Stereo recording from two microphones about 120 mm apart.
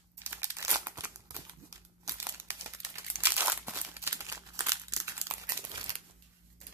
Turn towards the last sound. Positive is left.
turn(degrees=-30)  # may be behind; listen again after turning